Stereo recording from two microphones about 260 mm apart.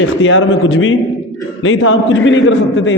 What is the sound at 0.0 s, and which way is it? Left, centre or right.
A man's voice, left.